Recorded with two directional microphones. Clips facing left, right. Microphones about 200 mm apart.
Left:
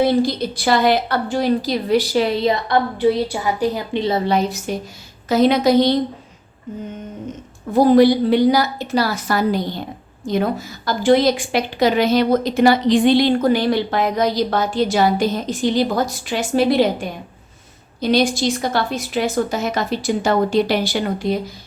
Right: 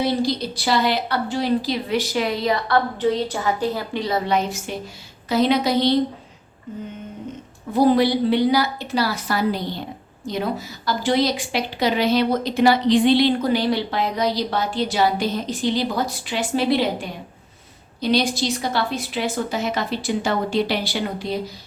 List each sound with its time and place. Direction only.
0.0 s a woman's voice: 50° left (ahead or behind)
7.7 s a woman's voice: 45° left (ahead or behind)